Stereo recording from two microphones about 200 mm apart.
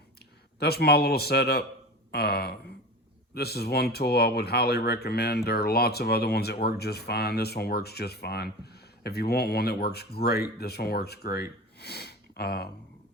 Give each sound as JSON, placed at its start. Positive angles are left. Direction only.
{"t": 0.6, "sound": "speech", "side_deg": 55}